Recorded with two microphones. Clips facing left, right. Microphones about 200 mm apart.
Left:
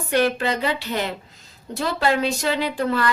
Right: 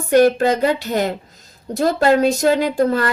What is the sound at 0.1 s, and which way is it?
A woman's voice, 45° right (ahead or behind).